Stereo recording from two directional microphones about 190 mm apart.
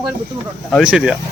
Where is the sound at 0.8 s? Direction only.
5° right (ahead or behind).